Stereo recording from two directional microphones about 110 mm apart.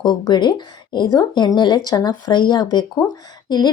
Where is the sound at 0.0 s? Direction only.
45° left (ahead or behind).